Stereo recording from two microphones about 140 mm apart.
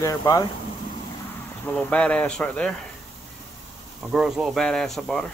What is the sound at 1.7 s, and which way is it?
Speech, 10° left (ahead or behind).